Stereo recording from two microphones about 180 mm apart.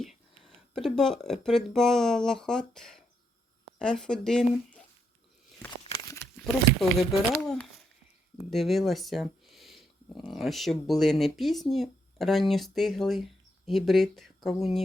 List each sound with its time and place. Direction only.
0.0 s speech: centre (ahead or behind)
5.8 s a sound: 20° left (ahead or behind)
7.1 s speech: 5° left (ahead or behind)